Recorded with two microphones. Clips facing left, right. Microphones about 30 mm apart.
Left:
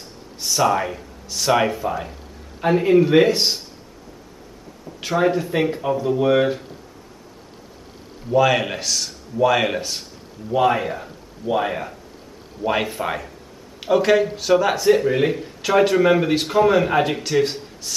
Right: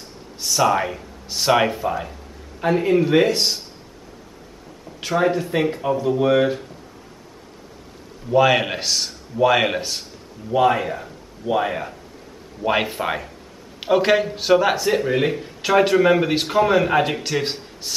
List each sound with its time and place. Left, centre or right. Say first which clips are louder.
0.4 s a sound: even; centre
0.7 s speech: even; centre
4.8 s speech: even; centre
8.3 s speech: right 1 dB; centre
12.6 s a man's voice: right 1 dB; centre
17.4 s speech: left 5 dB; centre